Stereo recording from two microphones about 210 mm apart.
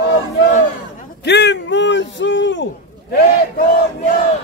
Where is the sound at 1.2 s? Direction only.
55° left (ahead or behind).